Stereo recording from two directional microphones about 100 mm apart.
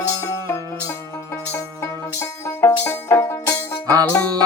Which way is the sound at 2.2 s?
25° left (ahead or behind).